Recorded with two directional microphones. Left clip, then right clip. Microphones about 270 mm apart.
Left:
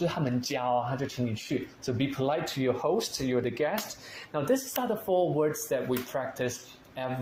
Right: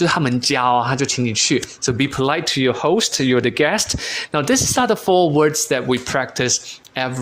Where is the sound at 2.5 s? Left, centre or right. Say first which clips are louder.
Right 11 dB; right.